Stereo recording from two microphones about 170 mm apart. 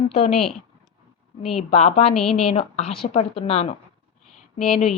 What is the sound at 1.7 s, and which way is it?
Speech, 40° left (ahead or behind).